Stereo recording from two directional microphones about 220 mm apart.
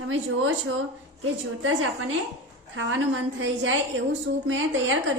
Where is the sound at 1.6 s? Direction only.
75° right (ahead or behind).